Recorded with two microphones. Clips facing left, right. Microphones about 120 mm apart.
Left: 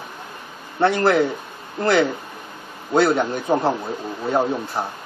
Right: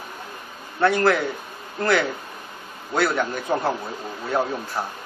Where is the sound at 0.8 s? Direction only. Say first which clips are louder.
Left 2 dB; 25° left (ahead or behind).